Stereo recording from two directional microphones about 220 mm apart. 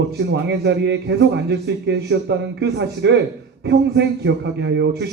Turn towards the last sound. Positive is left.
turn(degrees=-50)  # may be behind; listen again after turning